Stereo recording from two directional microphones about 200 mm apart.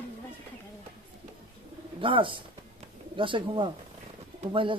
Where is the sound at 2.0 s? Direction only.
25° right (ahead or behind).